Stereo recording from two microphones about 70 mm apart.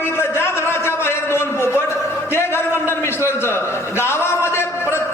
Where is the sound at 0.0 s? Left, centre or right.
Left.